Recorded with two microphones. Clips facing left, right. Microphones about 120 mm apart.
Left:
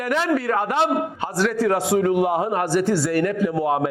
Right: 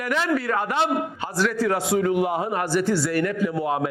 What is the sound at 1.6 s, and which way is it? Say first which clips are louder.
A man's voice: left 4 dB; 45° left (ahead or behind).